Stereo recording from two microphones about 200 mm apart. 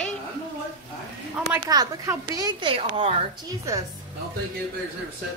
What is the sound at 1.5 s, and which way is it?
A woman's voice, 15° right (ahead or behind).